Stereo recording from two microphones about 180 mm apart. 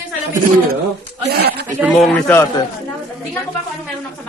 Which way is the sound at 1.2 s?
60° right (ahead or behind).